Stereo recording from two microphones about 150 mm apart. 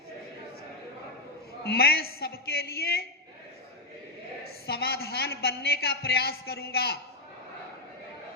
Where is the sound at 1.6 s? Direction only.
90° left.